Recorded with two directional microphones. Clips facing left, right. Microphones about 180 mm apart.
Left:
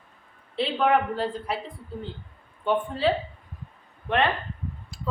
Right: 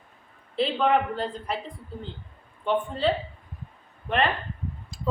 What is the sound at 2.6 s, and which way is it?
Speech, 5° left (ahead or behind).